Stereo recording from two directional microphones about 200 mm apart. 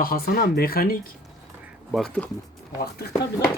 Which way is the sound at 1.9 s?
Centre (ahead or behind).